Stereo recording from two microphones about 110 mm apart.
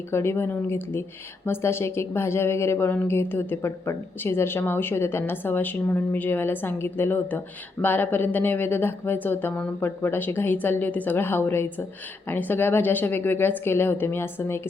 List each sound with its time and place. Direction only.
0.1 s a woman's voice: 25° left (ahead or behind)